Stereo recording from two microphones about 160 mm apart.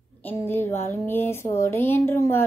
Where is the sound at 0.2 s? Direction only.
15° left (ahead or behind).